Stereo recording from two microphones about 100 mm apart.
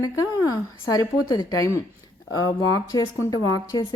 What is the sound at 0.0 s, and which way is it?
A woman's voice, 35° left (ahead or behind).